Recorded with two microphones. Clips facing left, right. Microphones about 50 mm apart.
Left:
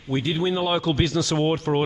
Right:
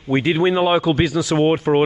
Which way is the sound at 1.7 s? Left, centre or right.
Right.